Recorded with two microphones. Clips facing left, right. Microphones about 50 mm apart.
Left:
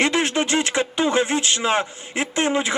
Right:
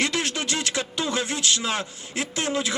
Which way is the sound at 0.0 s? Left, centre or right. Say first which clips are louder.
Left 6 dB; left.